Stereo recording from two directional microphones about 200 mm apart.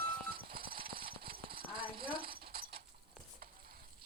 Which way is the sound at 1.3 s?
50° right (ahead or behind).